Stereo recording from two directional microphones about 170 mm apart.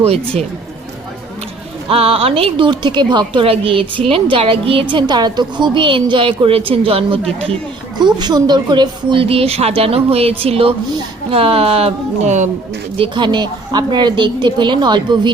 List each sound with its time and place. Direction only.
0.0 s a woman's voice: 35° right (ahead or behind)
1.9 s a woman's voice: 35° right (ahead or behind)
13.0 s a woman's voice: 25° right (ahead or behind)